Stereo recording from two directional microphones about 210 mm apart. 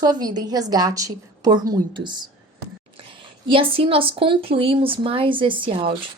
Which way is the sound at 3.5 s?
25° right (ahead or behind).